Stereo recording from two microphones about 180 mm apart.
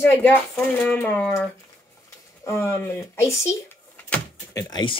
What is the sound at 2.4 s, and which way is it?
Speech, 15° left (ahead or behind).